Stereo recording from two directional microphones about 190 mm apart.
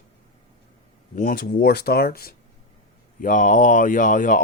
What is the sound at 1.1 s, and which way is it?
Speech, 45° left (ahead or behind).